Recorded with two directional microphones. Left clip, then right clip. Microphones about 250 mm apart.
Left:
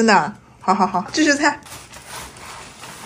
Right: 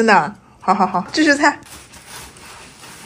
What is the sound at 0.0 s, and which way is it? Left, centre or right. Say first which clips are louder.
A woman's voice: right 2 dB; centre.